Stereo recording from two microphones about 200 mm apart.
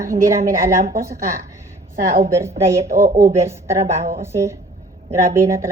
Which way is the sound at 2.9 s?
40° right (ahead or behind).